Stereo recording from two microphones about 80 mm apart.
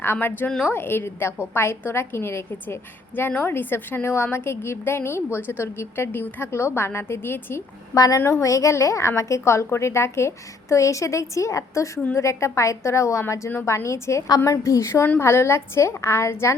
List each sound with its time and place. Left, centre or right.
0.0 s a woman's voice: left
7.9 s a woman's voice: left
8.2 s a woman's voice: left